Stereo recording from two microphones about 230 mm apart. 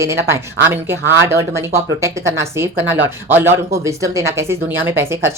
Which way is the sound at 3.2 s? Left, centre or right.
Centre.